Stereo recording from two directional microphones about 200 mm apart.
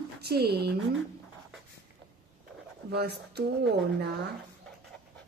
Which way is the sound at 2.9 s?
55° right (ahead or behind).